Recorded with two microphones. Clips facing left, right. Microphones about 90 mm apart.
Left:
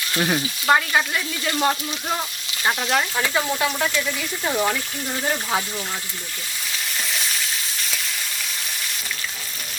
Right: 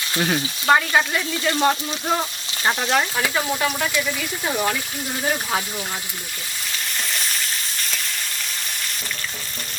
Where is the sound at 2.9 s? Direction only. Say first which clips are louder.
Right 1 dB; 5° right (ahead or behind).